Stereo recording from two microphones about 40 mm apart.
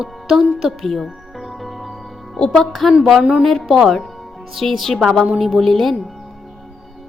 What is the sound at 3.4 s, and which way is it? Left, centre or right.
A woman's voice, centre.